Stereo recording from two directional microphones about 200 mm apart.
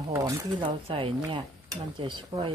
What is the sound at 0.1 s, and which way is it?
Speech, 20° right (ahead or behind).